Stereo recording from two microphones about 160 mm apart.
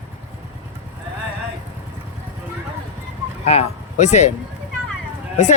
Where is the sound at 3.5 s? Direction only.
45° left (ahead or behind).